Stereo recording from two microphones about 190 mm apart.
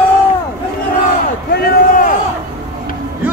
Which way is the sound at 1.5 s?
45° left (ahead or behind).